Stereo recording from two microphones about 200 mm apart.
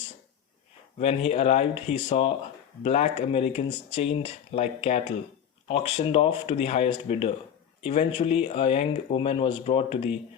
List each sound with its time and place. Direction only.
0.9 s speech: 30° left (ahead or behind)